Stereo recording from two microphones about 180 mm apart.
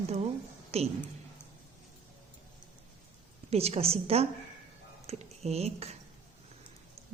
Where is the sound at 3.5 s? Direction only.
35° right (ahead or behind).